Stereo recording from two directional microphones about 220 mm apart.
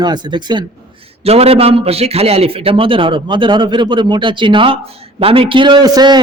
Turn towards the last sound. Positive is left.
turn(degrees=-20)  # may be behind; listen again after turning